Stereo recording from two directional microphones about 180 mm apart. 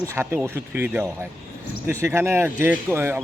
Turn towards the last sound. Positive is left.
turn(degrees=-10)  # may be behind; listen again after turning